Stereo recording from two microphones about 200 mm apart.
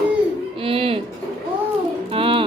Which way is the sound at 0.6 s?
25° right (ahead or behind).